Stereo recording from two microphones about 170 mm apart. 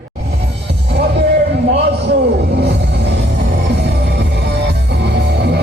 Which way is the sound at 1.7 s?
80° right.